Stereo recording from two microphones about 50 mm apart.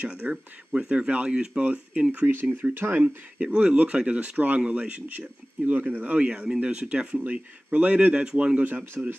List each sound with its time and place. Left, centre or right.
0.1 s speech: centre
1.6 s speech: right
2.6 s speech: right
3.3 s speech: right